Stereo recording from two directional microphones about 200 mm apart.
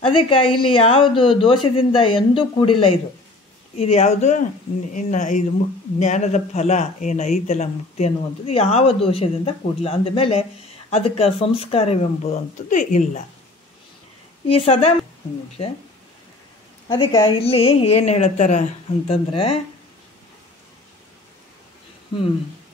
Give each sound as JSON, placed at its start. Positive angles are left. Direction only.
{"t": 0.0, "sound": "a man's voice", "side_deg": 25}
{"t": 14.5, "sound": "speech", "side_deg": 30}
{"t": 16.9, "sound": "speech", "side_deg": 25}